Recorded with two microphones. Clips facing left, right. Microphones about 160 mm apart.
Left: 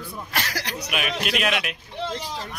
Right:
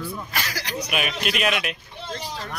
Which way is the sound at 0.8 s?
Centre (ahead or behind).